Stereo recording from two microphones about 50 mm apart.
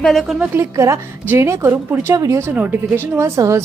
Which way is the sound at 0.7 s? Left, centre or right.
Right.